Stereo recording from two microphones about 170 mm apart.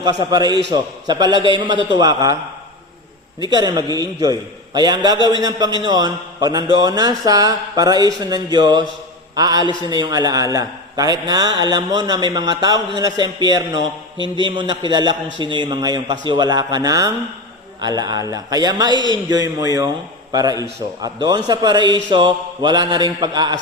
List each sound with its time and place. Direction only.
0.0 s a man's voice: 25° right (ahead or behind)
3.5 s a man's voice: 20° right (ahead or behind)